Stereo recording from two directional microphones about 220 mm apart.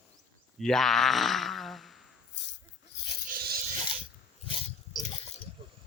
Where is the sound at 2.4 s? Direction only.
50° left (ahead or behind).